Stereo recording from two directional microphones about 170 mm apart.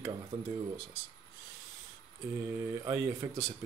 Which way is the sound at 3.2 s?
15° right (ahead or behind).